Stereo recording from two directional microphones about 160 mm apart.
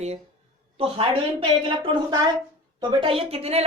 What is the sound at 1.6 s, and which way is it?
A woman's voice, 30° right (ahead or behind).